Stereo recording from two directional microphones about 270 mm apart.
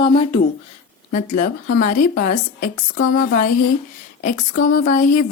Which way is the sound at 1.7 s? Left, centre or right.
Left.